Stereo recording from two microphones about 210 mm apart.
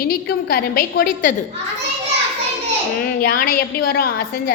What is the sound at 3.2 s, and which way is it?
A woman's voice, 45° left (ahead or behind).